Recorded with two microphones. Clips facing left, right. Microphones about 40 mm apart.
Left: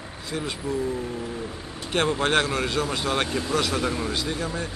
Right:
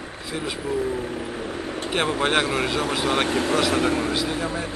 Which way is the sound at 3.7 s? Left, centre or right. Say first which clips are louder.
Right 4 dB; right.